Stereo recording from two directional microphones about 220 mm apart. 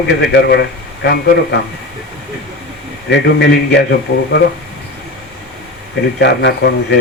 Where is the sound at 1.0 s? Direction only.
45° left (ahead or behind).